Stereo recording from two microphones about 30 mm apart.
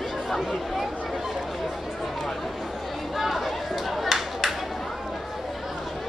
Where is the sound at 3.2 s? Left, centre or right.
Centre.